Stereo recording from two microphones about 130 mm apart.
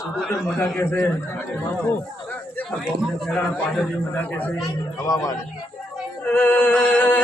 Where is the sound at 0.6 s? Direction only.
20° left (ahead or behind).